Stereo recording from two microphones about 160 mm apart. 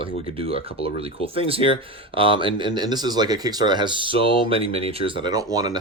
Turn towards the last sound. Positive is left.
turn(degrees=-20)  # may be behind; listen again after turning